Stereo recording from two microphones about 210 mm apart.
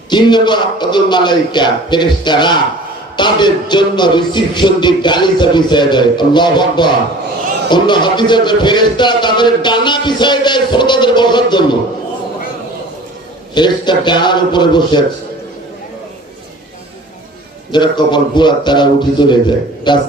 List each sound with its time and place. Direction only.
0.1 s a man's voice: 20° left (ahead or behind)
13.5 s a man's voice: 20° left (ahead or behind)
17.7 s a man's voice: 20° left (ahead or behind)